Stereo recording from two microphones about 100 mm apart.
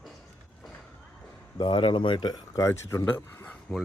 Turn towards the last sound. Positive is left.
turn(degrees=20)  # may be behind; listen again after turning